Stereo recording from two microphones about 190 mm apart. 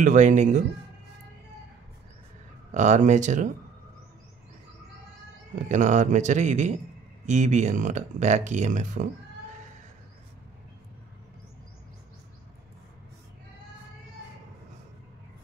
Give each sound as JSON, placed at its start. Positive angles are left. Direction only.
{"t": 0.0, "sound": "speech", "side_deg": -40}
{"t": 2.7, "sound": "speech", "side_deg": -40}
{"t": 5.7, "sound": "speech", "side_deg": -40}